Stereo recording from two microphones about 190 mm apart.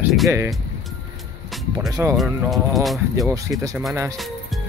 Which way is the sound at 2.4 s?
Centre (ahead or behind).